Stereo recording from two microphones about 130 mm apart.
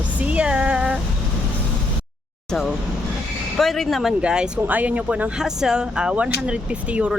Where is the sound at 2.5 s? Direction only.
Centre (ahead or behind).